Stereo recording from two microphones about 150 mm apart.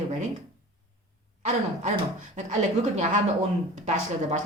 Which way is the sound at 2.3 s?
55° right (ahead or behind).